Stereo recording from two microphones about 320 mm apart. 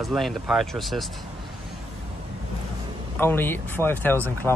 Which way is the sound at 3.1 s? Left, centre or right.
Centre.